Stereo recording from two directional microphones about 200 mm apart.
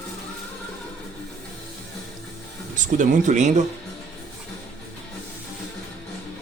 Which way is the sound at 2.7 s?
40° right (ahead or behind).